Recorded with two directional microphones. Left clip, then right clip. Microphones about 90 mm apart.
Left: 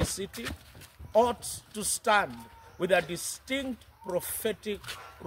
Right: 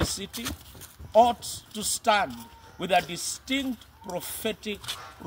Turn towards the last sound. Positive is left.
turn(degrees=35)  # may be behind; listen again after turning